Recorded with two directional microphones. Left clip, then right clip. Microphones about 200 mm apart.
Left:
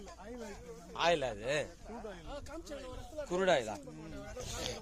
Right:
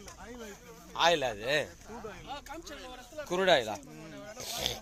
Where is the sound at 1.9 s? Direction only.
15° left (ahead or behind).